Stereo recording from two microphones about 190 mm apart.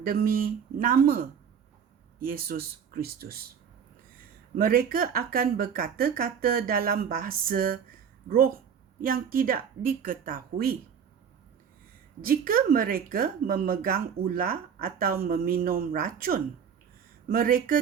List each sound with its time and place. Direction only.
0.0 s speech: 50° right (ahead or behind)
4.5 s speech: 50° right (ahead or behind)
12.2 s speech: 50° right (ahead or behind)